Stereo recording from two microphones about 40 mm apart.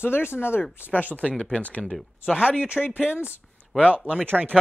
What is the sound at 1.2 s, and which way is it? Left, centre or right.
Speech, left.